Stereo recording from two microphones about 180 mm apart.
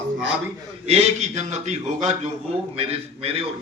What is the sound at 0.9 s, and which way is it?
A man's voice, 35° right (ahead or behind).